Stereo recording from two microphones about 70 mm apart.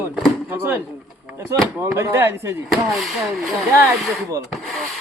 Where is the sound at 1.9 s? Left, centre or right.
Right.